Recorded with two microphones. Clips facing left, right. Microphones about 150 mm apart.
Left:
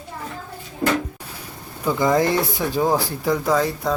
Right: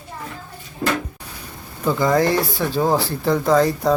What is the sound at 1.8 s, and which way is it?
Speech, 15° left (ahead or behind).